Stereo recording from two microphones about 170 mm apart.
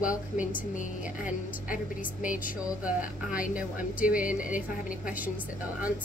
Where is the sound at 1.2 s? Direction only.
50° left (ahead or behind).